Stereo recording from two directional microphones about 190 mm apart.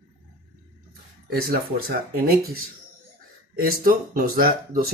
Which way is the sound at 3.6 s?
50° right (ahead or behind).